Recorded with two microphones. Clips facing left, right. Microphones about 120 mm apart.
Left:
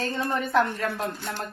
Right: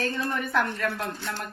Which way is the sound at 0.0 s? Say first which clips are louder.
Left 1 dB; 20° left (ahead or behind).